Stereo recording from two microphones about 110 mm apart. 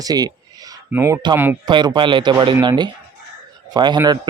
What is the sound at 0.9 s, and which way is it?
Speech, 20° right (ahead or behind).